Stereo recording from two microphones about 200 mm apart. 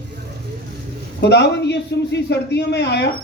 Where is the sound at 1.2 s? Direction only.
55° left (ahead or behind).